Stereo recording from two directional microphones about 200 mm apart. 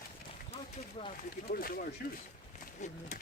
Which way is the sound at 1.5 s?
45° left (ahead or behind).